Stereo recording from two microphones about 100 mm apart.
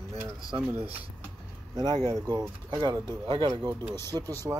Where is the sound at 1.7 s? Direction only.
45° right (ahead or behind).